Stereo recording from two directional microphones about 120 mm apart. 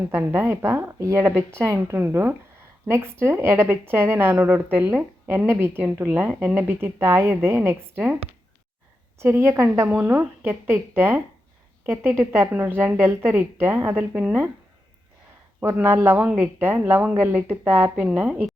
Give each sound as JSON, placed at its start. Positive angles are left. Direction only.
{"t": 0.1, "sound": "a woman's voice", "side_deg": -20}
{"t": 9.1, "sound": "a woman's voice", "side_deg": -20}
{"t": 15.6, "sound": "a woman's voice", "side_deg": -15}